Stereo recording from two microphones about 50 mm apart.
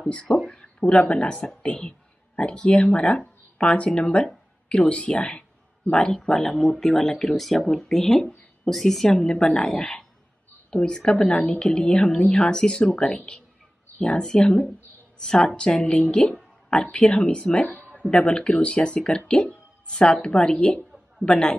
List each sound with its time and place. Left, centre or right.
0.1 s a woman's voice: centre
6.1 s a woman's voice: centre